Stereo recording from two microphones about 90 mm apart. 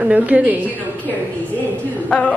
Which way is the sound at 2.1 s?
15° left (ahead or behind).